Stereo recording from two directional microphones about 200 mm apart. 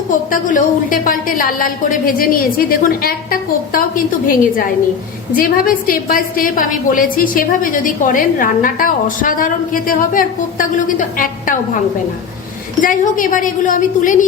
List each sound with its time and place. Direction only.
0.1 s a woman's voice: 40° left (ahead or behind)
12.8 s a woman's voice: 40° left (ahead or behind)